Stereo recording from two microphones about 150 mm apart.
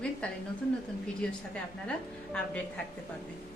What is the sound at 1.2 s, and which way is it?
A woman's voice, 5° left (ahead or behind).